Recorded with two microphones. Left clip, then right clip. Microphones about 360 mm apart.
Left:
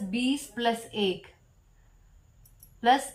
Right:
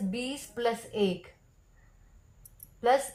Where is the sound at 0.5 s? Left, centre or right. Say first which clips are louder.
Right 2 dB; right.